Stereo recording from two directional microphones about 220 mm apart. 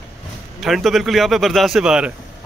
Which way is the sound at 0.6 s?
Centre (ahead or behind).